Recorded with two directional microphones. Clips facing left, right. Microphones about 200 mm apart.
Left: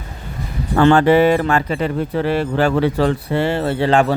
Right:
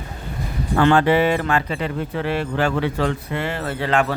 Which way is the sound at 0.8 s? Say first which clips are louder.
Left 4 dB; 40° left (ahead or behind).